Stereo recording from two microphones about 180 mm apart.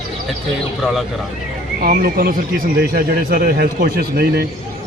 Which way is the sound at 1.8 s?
55° right (ahead or behind).